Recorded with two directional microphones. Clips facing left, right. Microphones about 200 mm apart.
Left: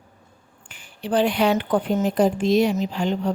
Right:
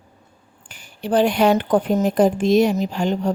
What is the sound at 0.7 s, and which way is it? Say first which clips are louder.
A woman's voice: right 3 dB; 40° right (ahead or behind).